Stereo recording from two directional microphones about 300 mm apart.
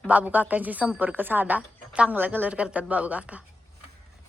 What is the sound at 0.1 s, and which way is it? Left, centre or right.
Speech, centre.